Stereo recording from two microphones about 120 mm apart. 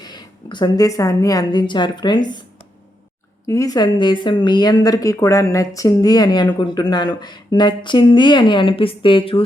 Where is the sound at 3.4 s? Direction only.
25° left (ahead or behind).